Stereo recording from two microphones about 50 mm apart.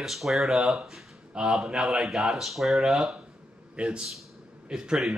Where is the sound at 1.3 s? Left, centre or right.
Centre.